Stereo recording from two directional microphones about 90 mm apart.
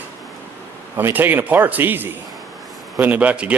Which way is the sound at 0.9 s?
20° right (ahead or behind).